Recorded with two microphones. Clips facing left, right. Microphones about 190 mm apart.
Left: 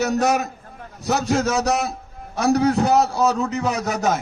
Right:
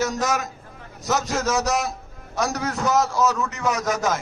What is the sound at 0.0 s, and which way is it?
Speech, 65° left (ahead or behind).